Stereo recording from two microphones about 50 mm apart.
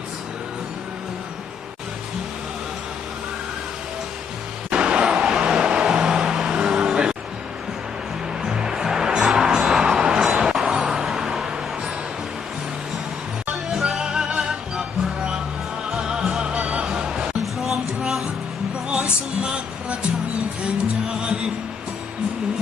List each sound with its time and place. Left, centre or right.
4.7 s vehicle: right
8.4 s music: centre
13.5 s music: centre
17.4 s music: centre
18.9 s music: right